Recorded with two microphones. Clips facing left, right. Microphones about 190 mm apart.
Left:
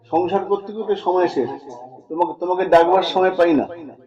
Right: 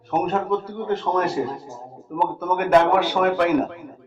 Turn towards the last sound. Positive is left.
turn(degrees=35)  # may be behind; listen again after turning